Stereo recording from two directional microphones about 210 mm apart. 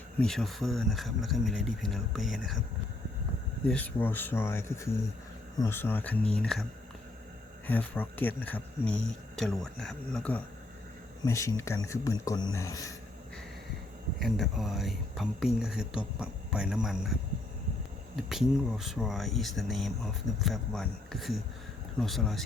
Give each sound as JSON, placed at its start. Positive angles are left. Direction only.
{"t": 0.2, "sound": "speech", "side_deg": 0}
{"t": 3.7, "sound": "speech", "side_deg": 10}
{"t": 7.7, "sound": "speech", "side_deg": 10}
{"t": 14.2, "sound": "speech", "side_deg": 0}
{"t": 18.2, "sound": "speech", "side_deg": 0}